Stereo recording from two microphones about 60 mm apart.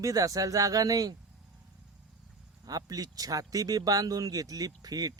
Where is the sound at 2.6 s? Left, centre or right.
Right.